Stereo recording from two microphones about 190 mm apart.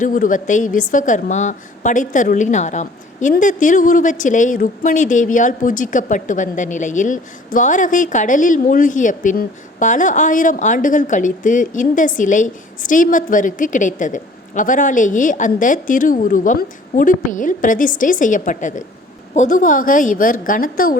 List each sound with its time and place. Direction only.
0.0 s a woman's voice: 45° left (ahead or behind)